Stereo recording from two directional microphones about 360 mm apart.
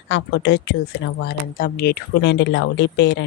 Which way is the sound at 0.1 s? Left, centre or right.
Left.